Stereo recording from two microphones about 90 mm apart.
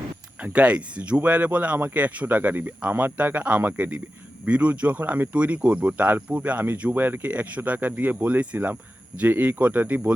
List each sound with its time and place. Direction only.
0.4 s speech: 15° right (ahead or behind)